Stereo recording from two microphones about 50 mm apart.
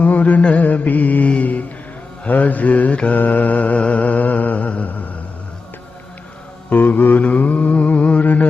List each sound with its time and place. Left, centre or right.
0.0 s mantra: left
6.7 s mantra: left